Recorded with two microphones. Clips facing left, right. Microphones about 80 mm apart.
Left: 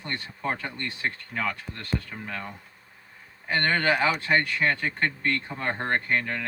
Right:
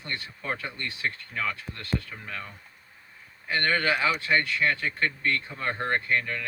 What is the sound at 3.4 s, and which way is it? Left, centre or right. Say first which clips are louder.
Speech: left 2 dB; left.